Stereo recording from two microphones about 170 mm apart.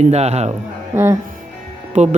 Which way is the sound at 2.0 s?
45° right (ahead or behind).